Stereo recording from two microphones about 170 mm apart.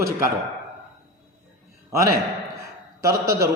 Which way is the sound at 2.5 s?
20° right (ahead or behind).